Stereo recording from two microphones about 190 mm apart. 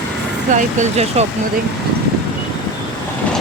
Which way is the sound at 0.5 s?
35° right (ahead or behind).